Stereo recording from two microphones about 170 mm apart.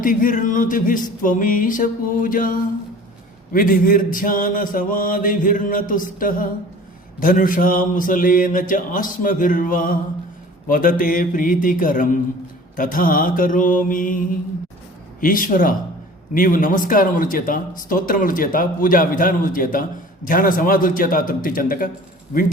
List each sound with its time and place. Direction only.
0.0 s a man's voice: 55° left (ahead or behind)